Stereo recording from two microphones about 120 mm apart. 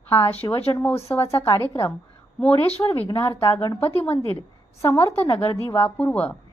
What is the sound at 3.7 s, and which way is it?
A woman's voice, 15° left (ahead or behind).